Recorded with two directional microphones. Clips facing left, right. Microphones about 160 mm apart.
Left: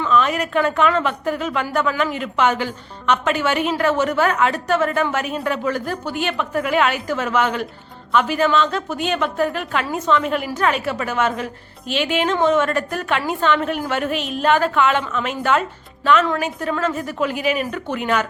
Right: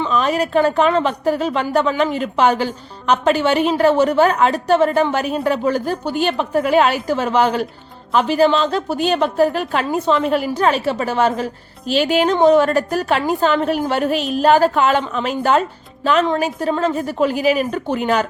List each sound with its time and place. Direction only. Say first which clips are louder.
0.1 s a woman's voice: even; 35° right (ahead or behind)